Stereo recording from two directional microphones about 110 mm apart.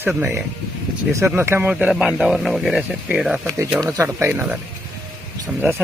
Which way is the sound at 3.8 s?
25° right (ahead or behind).